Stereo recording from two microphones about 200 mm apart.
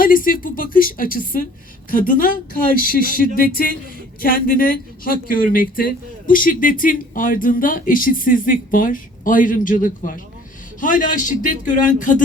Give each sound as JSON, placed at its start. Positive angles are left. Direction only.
{"t": 0.0, "sound": "a man's voice", "side_deg": 45}